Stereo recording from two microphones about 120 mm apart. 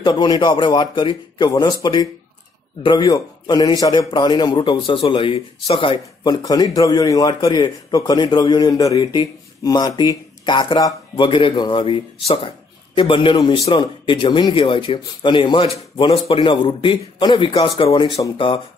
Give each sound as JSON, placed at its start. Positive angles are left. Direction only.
{"t": 0.0, "sound": "a man's voice", "side_deg": 40}
{"t": 15.6, "sound": "speech", "side_deg": 55}